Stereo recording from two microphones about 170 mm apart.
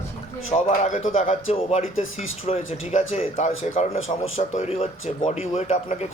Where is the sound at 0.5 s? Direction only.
45° left (ahead or behind).